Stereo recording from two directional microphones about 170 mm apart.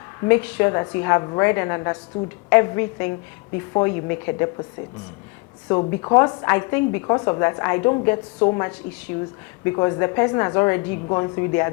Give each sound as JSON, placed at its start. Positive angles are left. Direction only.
{"t": 0.2, "sound": "a woman's voice", "side_deg": 15}
{"t": 5.9, "sound": "a woman's voice", "side_deg": 20}